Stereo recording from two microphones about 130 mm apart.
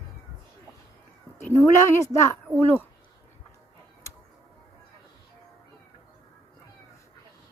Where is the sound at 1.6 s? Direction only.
20° left (ahead or behind).